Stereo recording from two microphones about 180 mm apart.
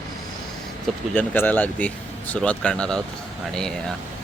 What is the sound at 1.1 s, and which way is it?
Speech, 10° left (ahead or behind).